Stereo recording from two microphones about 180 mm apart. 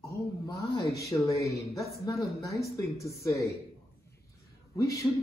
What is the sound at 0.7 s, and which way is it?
A man's voice, 20° left (ahead or behind).